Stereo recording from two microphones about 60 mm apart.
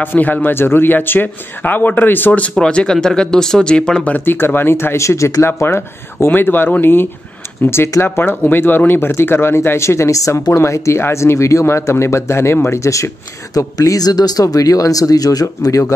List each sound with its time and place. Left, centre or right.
0.0 s speech: left
2.6 s speech: centre
4.2 s speech: left
5.6 s speech: left
13.6 s speech: left